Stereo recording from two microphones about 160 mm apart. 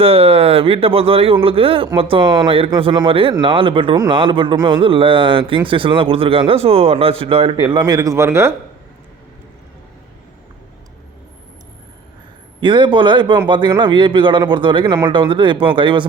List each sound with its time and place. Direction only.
0.0 s a man's voice: 35° right (ahead or behind); by 8.5 s 15° right (ahead or behind)
12.6 s a man's voice: 30° right (ahead or behind)